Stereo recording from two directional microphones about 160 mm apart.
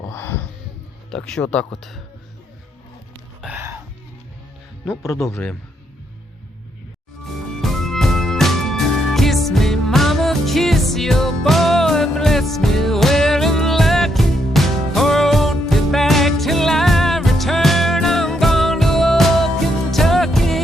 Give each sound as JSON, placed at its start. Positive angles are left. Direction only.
{"t": 0.0, "sound": "wail", "side_deg": 15}
{"t": 1.1, "sound": "speech", "side_deg": 5}
{"t": 3.4, "sound": "music", "side_deg": -10}
{"t": 4.9, "sound": "speech", "side_deg": 15}
{"t": 7.6, "sound": "music", "side_deg": 0}